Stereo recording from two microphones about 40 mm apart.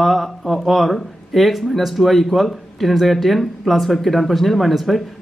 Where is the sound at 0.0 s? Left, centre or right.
Centre.